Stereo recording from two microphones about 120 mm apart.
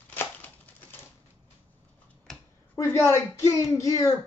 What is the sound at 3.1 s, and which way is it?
Speech, 25° left (ahead or behind).